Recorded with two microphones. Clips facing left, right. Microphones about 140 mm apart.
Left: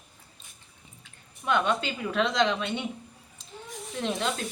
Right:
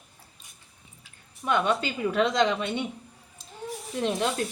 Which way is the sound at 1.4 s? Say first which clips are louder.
Right 1 dB; 10° right (ahead or behind).